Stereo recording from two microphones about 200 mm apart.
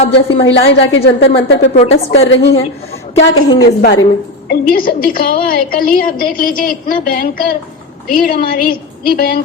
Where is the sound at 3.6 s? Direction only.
55° left (ahead or behind).